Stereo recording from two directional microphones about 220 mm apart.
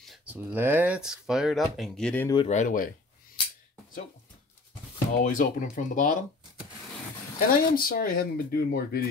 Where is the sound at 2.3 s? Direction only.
30° left (ahead or behind).